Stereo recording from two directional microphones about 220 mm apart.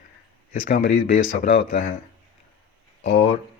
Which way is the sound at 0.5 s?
40° left (ahead or behind).